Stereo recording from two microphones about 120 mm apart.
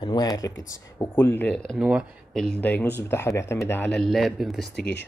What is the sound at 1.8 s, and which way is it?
Speech, 5° right (ahead or behind).